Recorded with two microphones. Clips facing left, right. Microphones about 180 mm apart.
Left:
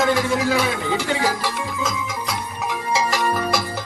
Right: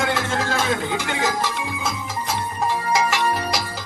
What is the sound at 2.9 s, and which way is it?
Music, 35° left (ahead or behind).